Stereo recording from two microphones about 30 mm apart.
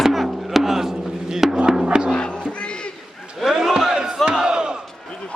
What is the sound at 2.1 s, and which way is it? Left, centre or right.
Music, left.